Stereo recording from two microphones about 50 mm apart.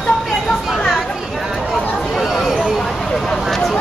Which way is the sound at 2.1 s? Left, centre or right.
Centre.